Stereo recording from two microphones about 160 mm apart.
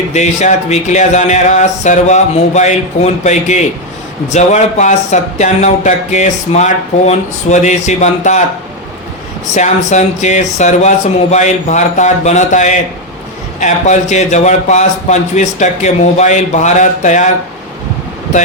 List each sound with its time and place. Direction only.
0.1 s speech: 45° left (ahead or behind)
9.6 s speech: 45° left (ahead or behind)